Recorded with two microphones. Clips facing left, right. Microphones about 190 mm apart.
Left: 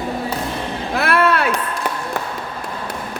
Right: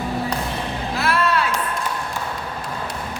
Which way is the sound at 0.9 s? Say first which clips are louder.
Left 4 dB; 60° left (ahead or behind).